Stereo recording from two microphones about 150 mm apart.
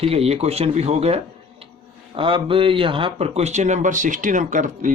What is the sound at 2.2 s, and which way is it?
Speech, 35° right (ahead or behind).